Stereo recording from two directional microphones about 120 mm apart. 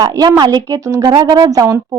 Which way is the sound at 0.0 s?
30° right (ahead or behind).